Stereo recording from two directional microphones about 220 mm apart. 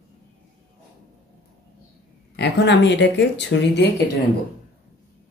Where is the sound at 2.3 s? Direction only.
50° left (ahead or behind).